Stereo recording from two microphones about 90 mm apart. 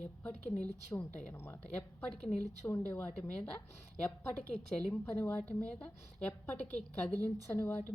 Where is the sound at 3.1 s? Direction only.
10° left (ahead or behind).